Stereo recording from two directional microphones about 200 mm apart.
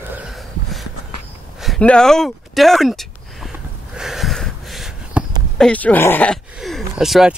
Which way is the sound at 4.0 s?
Centre (ahead or behind).